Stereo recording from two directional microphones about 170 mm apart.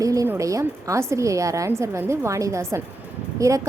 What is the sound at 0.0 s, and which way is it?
A woman's voice, 20° right (ahead or behind).